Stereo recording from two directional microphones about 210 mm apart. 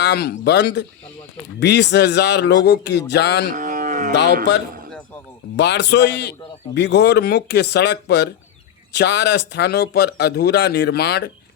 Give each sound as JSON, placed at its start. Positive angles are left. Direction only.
{"t": 0.0, "sound": "speech", "side_deg": 50}
{"t": 3.5, "sound": "livestock", "side_deg": -35}
{"t": 5.5, "sound": "speech", "side_deg": 55}